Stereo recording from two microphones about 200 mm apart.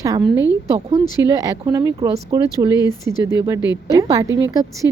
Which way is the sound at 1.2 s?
20° right (ahead or behind).